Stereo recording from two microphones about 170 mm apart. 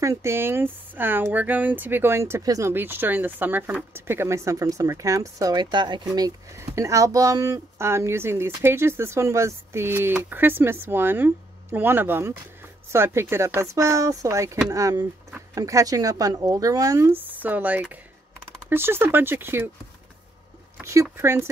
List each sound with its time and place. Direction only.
0.0 s a woman's voice: 15° right (ahead or behind)
20.8 s speech: 15° right (ahead or behind)